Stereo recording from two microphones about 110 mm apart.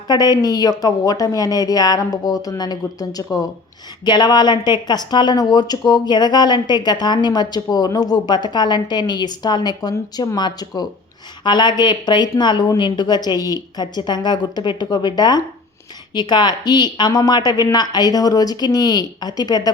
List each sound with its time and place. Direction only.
0.1 s speech: 35° left (ahead or behind)